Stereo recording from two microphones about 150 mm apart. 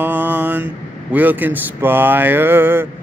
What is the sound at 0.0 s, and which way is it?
Mantra, 10° right (ahead or behind).